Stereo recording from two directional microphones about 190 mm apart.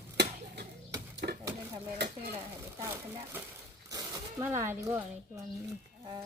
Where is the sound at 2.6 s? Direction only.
15° right (ahead or behind).